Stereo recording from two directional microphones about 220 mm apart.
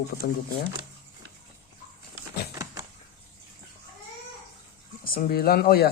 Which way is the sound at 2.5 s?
15° right (ahead or behind).